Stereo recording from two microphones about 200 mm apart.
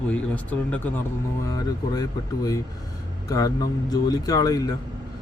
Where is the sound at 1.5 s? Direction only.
20° left (ahead or behind).